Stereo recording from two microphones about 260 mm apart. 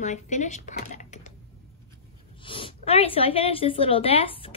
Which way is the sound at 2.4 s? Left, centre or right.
Centre.